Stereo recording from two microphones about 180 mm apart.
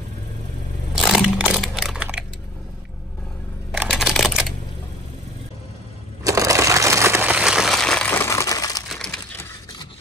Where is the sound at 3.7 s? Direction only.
5° right (ahead or behind).